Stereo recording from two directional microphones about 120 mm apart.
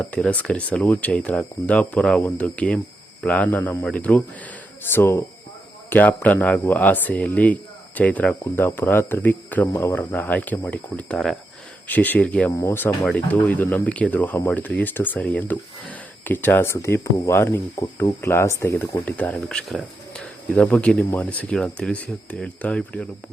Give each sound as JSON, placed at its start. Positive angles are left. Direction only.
{"t": 0.0, "sound": "speech", "side_deg": 10}
{"t": 12.5, "sound": "speech", "side_deg": 25}
{"t": 19.4, "sound": "speech", "side_deg": 5}